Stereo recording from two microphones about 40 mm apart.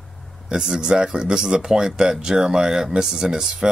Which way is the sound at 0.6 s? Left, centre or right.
Centre.